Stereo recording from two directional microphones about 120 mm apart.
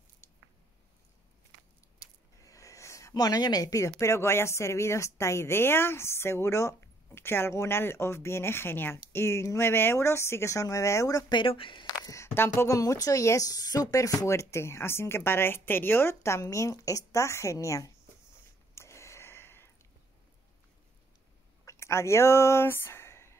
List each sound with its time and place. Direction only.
2.0 s speech: 30° left (ahead or behind); by 11.8 s 45° left (ahead or behind)
11.8 s speech: 30° left (ahead or behind)
18.8 s a sound: 25° left (ahead or behind)
21.6 s speech: 20° left (ahead or behind)